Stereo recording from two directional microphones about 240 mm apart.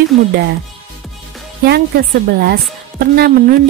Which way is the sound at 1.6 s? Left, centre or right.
Right.